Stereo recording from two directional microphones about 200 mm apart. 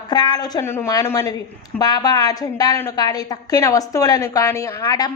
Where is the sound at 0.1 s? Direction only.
20° left (ahead or behind).